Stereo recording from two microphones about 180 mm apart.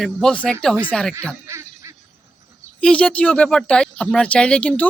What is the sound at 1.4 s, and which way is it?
Honk, 15° right (ahead or behind).